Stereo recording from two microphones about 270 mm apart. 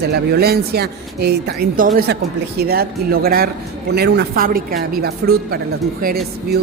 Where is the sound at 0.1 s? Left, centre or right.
Right.